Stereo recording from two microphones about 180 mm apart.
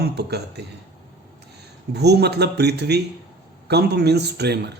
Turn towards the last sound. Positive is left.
turn(degrees=-65)  # may be behind; listen again after turning